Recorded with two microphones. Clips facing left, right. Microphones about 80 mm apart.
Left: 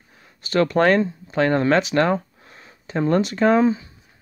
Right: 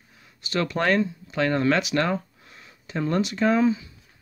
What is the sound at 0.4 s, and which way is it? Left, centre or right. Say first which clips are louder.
Speech: left 7 dB; left.